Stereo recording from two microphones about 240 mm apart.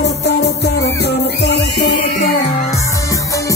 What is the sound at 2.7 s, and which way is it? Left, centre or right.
Music, centre.